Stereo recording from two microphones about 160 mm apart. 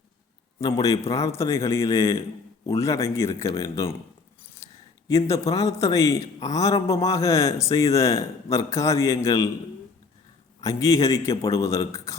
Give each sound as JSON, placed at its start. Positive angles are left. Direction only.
{"t": 0.6, "sound": "a man's voice", "side_deg": 20}
{"t": 10.6, "sound": "a man's voice", "side_deg": 20}